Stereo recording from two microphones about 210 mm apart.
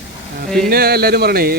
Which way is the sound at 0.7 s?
45° right (ahead or behind).